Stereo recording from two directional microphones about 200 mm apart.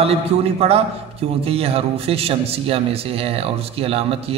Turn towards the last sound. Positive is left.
turn(degrees=-30)  # may be behind; listen again after turning